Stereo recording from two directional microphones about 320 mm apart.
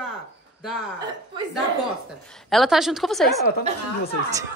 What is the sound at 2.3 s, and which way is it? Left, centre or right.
A woman's voice, centre.